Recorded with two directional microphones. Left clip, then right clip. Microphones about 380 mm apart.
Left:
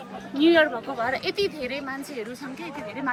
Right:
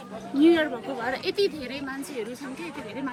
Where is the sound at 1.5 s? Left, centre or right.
Left.